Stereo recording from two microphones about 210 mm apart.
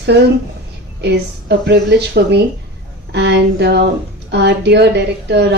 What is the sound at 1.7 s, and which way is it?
A woman's voice, 55° right (ahead or behind).